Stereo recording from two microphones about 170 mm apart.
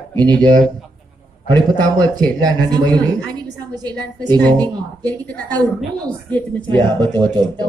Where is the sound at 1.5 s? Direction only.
25° right (ahead or behind).